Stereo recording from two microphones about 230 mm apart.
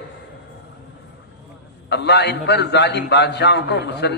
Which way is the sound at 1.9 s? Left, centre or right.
Left.